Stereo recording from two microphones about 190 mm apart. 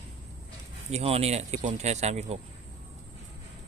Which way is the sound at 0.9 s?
30° right (ahead or behind).